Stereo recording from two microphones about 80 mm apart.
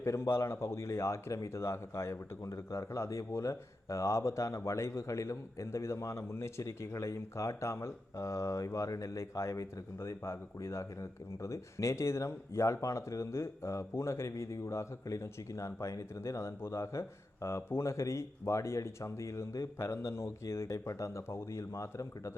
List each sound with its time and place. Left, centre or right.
0.0 s speech: left